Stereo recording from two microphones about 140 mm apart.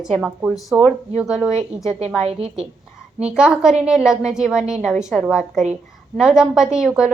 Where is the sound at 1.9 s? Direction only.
50° right (ahead or behind).